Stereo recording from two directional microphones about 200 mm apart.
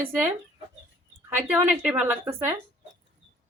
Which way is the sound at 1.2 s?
5° right (ahead or behind).